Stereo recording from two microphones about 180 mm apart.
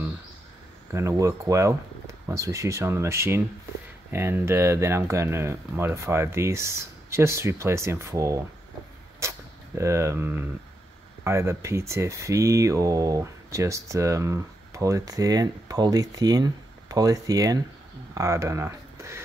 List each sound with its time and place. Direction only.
0.9 s speech: 15° right (ahead or behind)
9.2 s arrow: 15° right (ahead or behind)
9.8 s speech: 15° right (ahead or behind)